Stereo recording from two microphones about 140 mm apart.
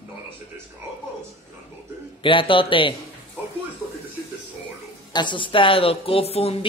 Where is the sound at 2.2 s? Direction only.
40° left (ahead or behind).